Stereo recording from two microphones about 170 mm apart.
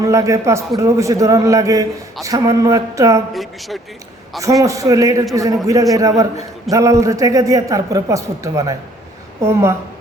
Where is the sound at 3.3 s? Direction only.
Centre (ahead or behind).